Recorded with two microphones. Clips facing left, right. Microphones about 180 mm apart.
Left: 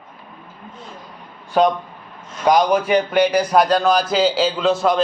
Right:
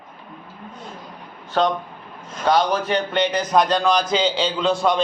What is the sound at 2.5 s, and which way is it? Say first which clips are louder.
A man's voice: left 4 dB; 10° left (ahead or behind).